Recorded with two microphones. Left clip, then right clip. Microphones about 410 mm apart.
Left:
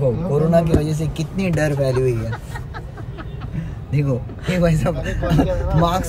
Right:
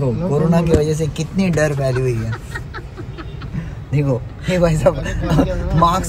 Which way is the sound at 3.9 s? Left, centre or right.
Centre.